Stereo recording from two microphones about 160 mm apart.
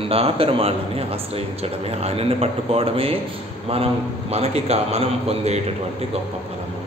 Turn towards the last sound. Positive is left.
turn(degrees=-40)  # may be behind; listen again after turning